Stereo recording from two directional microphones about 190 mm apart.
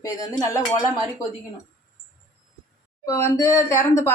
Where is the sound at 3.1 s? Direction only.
15° left (ahead or behind).